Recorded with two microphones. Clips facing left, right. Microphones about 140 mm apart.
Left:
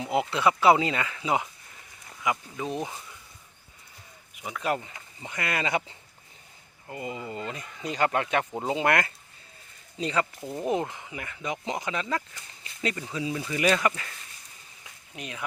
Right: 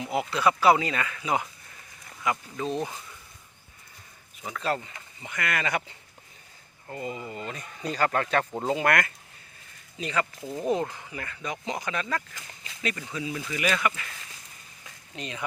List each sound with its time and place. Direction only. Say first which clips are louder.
0.0 s speech: left 1 dB; 25° left (ahead or behind)
4.4 s speech: even; 15° left (ahead or behind)
5.2 s speech: even; 25° left (ahead or behind)
6.9 s speech: even; 15° left (ahead or behind)
12.3 s speech: right 3 dB; 90° right
12.8 s speech: left 2 dB; 25° left (ahead or behind)
15.1 s speech: right 2 dB; 5° left (ahead or behind)